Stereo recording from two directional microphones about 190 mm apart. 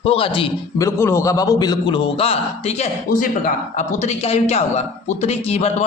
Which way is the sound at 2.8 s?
45° left (ahead or behind).